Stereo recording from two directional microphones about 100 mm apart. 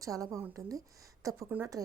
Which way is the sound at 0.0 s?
35° right (ahead or behind).